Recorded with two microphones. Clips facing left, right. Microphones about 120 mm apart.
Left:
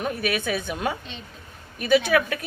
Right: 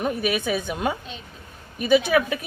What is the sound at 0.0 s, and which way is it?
Speech, 20° right (ahead or behind).